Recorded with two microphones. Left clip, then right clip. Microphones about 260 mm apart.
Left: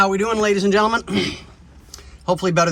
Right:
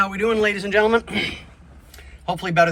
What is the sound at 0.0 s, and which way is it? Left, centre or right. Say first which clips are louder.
Speech: left 2 dB; centre.